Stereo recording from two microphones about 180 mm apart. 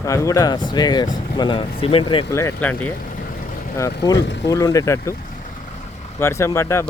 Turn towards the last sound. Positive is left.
turn(degrees=15)  # may be behind; listen again after turning